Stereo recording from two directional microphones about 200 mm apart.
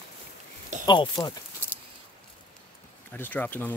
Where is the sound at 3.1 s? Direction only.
10° left (ahead or behind).